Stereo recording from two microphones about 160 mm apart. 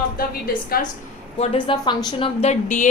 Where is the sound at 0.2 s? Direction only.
65° left (ahead or behind).